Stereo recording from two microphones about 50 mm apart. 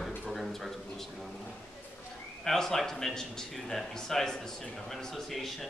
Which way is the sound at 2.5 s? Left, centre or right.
Centre.